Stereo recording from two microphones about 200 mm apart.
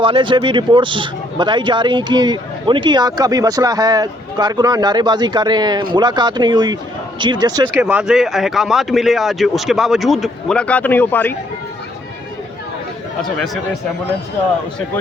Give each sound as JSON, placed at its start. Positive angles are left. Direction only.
{"t": 0.0, "sound": "a man's voice", "side_deg": -25}
{"t": 7.8, "sound": "speech", "side_deg": -5}
{"t": 13.2, "sound": "speech", "side_deg": 0}